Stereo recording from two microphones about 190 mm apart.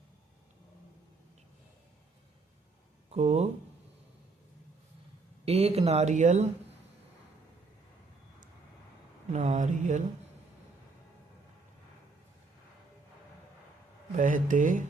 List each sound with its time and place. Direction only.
3.1 s speech: 35° right (ahead or behind)
5.5 s speech: 30° right (ahead or behind)
9.3 s speech: 35° right (ahead or behind)
14.2 s speech: 45° right (ahead or behind)